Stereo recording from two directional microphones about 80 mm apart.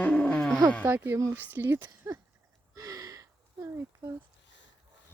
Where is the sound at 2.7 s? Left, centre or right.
Right.